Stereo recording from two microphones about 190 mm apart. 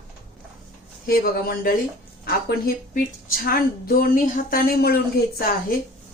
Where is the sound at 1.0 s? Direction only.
50° left (ahead or behind).